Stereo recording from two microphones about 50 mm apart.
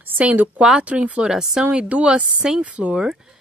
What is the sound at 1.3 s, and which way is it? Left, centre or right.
Speech, centre.